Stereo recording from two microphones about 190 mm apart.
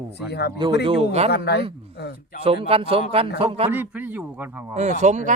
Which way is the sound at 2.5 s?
30° right (ahead or behind).